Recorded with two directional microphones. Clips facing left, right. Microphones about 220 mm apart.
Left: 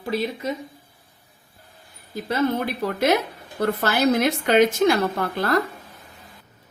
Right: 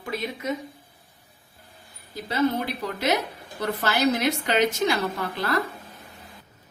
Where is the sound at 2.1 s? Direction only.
50° left (ahead or behind).